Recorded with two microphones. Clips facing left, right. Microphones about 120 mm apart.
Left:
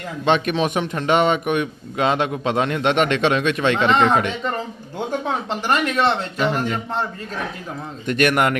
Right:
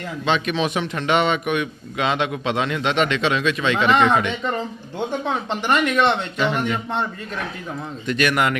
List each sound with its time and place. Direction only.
0.3 s a man's voice: 50° left (ahead or behind)
3.8 s speech: 30° left (ahead or behind)
5.8 s speech: 35° left (ahead or behind)
8.0 s a man's voice: 50° left (ahead or behind)